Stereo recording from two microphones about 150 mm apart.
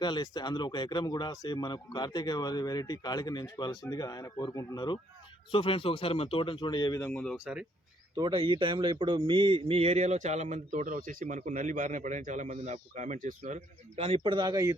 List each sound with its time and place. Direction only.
0.0 s speech: 30° left (ahead or behind)
7.0 s speech: 10° left (ahead or behind)
7.3 s speech: 5° right (ahead or behind)
8.1 s speech: 30° right (ahead or behind)